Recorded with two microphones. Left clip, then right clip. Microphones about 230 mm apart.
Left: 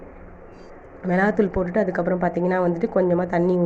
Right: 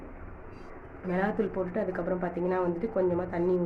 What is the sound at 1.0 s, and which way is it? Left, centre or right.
Speech, left.